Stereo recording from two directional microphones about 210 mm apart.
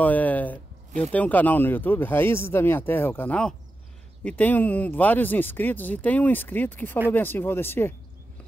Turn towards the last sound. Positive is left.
turn(degrees=10)  # may be behind; listen again after turning